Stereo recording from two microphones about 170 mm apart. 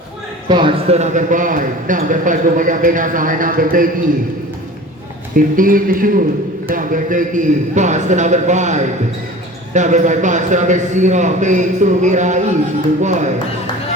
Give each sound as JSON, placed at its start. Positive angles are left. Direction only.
{"t": 0.4, "sound": "a man's voice", "side_deg": -30}
{"t": 5.5, "sound": "a man's voice", "side_deg": -55}